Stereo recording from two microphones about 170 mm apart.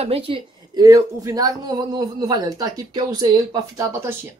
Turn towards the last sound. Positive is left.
turn(degrees=-15)  # may be behind; listen again after turning